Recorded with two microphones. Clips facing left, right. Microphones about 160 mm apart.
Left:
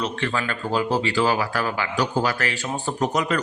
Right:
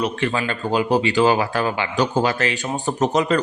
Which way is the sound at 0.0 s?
15° right (ahead or behind).